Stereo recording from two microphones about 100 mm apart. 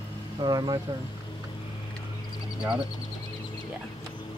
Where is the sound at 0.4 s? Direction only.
45° right (ahead or behind).